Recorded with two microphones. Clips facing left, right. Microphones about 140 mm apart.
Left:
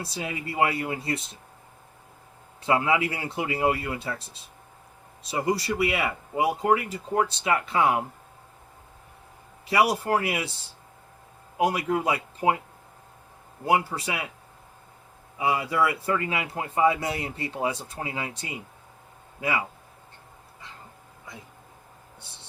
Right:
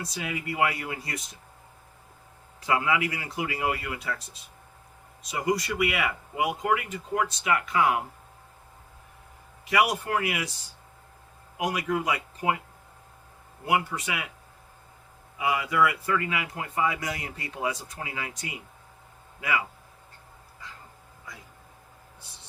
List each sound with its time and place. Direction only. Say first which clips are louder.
0.0 s speech: left 1 dB; 30° left (ahead or behind)
2.6 s speech: left 2 dB; 25° left (ahead or behind)
9.6 s speech: left 2 dB; 30° left (ahead or behind)
11.5 s speech: left 4 dB; 30° left (ahead or behind)
13.7 s speech: left 2 dB; 30° left (ahead or behind)
15.4 s speech: even; 30° left (ahead or behind)
22.2 s speech: left 2 dB; 30° left (ahead or behind)